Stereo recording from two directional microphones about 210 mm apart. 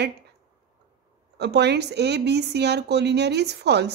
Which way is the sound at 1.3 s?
55° right (ahead or behind).